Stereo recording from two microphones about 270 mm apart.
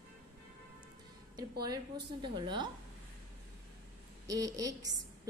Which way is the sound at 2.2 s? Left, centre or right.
Centre.